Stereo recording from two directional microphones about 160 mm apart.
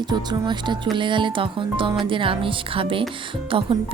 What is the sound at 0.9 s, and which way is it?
A woman's voice, 30° right (ahead or behind).